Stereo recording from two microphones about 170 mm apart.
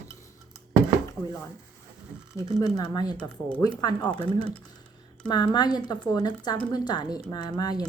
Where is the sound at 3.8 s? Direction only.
25° left (ahead or behind).